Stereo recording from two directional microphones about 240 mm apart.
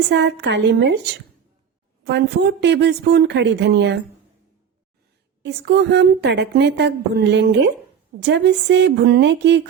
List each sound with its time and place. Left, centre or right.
0.1 s a woman's voice: right
2.0 s a woman's voice: right
5.4 s a woman's voice: right